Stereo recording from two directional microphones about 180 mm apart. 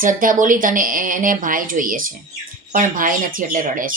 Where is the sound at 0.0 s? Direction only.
50° right (ahead or behind).